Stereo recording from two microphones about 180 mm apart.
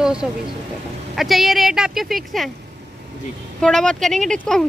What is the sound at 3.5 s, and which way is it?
A woman's voice, 5° left (ahead or behind).